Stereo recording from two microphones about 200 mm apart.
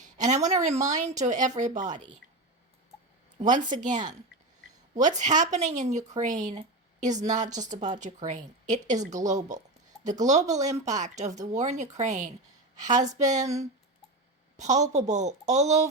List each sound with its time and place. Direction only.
0.3 s speech: 35° right (ahead or behind)
3.3 s speech: 40° right (ahead or behind)
5.0 s speech: 35° right (ahead or behind)
14.5 s speech: 35° right (ahead or behind)